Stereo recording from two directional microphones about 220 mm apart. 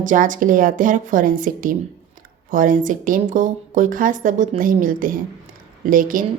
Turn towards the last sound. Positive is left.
turn(degrees=-40)  # may be behind; listen again after turning